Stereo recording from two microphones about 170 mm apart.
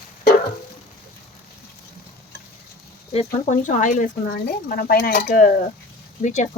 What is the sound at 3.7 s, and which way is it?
Speech, 50° left (ahead or behind).